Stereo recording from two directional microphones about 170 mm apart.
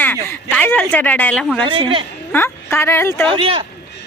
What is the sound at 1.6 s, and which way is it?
Speech, 30° right (ahead or behind).